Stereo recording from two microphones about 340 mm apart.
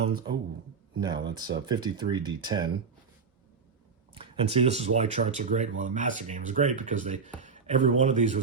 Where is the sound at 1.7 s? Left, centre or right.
Centre.